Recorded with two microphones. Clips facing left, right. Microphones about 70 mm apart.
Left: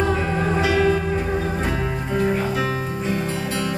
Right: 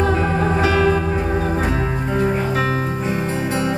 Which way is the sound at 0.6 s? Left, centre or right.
Right.